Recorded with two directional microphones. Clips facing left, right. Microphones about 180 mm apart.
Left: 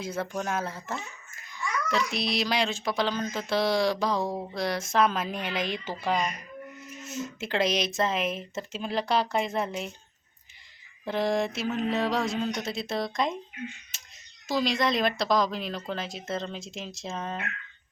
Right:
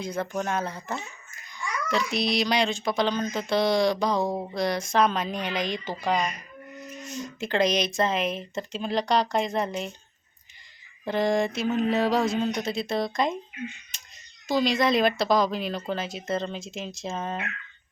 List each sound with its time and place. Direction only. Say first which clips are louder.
0.0 s speech: right 2 dB; 5° left (ahead or behind)
4.2 s speech: right 3 dB; 20° right (ahead or behind)
4.5 s speech: right 2 dB; centre (ahead or behind)
11.0 s speech: right 3 dB; centre (ahead or behind)